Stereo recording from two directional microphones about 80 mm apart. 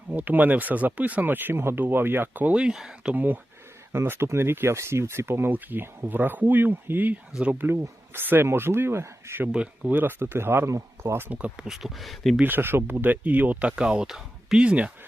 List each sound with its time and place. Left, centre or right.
0.1 s speech: centre
2.6 s speech: centre; by 9.5 s right
9.5 s speech: centre
11.3 s speech: centre
12.4 s speech: right